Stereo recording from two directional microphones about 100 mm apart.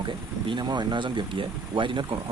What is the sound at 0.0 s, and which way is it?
Speech, 50° right (ahead or behind).